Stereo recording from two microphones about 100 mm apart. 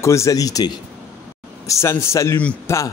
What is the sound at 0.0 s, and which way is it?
A man's voice, 30° left (ahead or behind).